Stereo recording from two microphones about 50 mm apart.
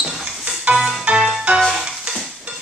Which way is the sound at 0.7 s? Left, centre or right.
Right.